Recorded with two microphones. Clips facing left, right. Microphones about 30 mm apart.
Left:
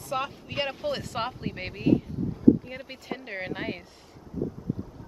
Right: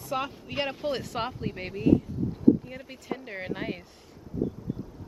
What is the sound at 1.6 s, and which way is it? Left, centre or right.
Speech, left.